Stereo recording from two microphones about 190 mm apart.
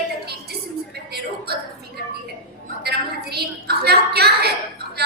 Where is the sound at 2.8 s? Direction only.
55° right (ahead or behind).